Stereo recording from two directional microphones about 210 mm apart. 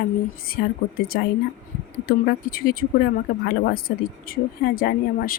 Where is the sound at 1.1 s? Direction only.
45° left (ahead or behind).